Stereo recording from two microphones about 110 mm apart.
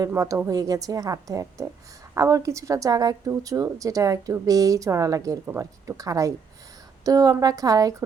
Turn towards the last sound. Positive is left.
turn(degrees=-35)  # may be behind; listen again after turning